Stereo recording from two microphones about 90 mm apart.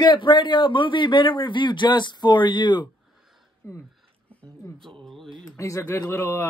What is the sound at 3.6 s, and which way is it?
Speech, 25° left (ahead or behind).